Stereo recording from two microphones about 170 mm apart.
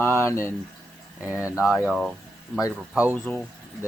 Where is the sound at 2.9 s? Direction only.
10° right (ahead or behind).